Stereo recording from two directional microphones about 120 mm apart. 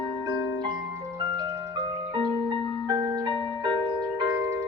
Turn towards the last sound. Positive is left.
turn(degrees=-40)  # may be behind; listen again after turning